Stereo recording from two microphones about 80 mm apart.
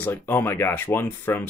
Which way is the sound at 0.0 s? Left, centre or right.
Left.